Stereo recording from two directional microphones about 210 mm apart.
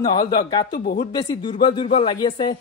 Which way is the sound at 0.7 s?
45° left (ahead or behind).